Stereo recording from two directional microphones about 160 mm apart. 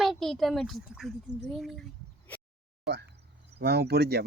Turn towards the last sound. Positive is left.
turn(degrees=-90)